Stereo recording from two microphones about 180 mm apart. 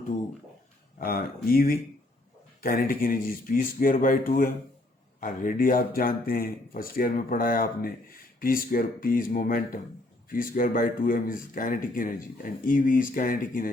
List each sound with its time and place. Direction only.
0.9 s speech: 55° left (ahead or behind)